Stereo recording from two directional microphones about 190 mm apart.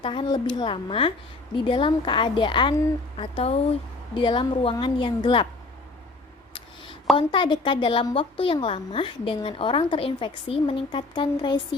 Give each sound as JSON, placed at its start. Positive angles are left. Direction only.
{"t": 0.0, "sound": "a woman's voice", "side_deg": 25}
{"t": 7.2, "sound": "a woman's voice", "side_deg": 25}